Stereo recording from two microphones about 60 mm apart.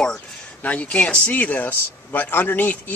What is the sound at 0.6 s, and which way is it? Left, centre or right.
Speech, left.